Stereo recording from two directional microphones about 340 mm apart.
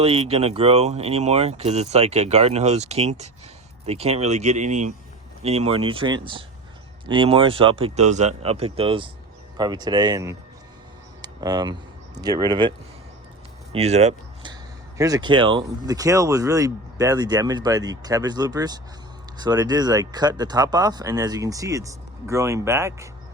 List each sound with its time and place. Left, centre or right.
0.0 s speech: centre
11.2 s a sound: centre
12.1 s speech: centre
13.7 s speech: centre